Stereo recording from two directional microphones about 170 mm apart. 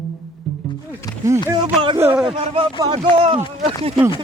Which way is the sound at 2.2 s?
25° right (ahead or behind).